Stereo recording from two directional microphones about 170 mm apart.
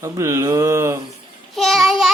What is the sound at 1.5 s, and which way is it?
Speech, centre (ahead or behind).